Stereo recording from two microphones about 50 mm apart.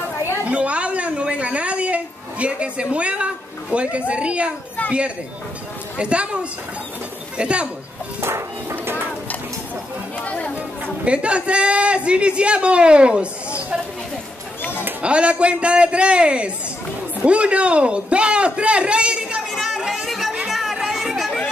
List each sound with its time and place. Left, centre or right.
0.5 s a sound: right
3.7 s a man's voice: right
5.9 s a man's voice: right
8.2 s music: right
10.2 s chatter: left
11.1 s a man's voice: right
14.6 s a sound: left
15.0 s a man's voice: right
19.5 s chatter: centre
19.8 s music: centre
20.1 s chatter: centre